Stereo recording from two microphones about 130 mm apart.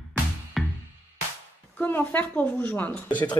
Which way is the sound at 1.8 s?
15° left (ahead or behind).